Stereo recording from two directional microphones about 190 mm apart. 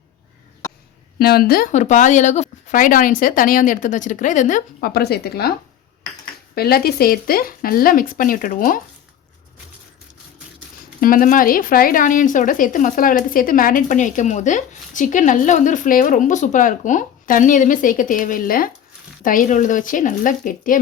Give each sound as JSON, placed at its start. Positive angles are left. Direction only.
{"t": 1.2, "sound": "speech", "side_deg": 55}
{"t": 11.0, "sound": "speech", "side_deg": 45}